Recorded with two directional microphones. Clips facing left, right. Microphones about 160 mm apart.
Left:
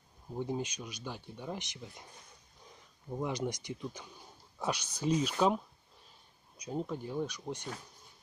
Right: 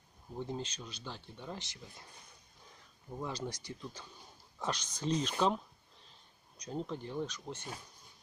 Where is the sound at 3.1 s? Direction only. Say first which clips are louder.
Left 5 dB; 15° left (ahead or behind).